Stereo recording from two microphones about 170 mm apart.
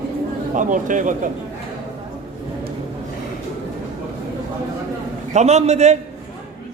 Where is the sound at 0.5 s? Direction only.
50° right (ahead or behind).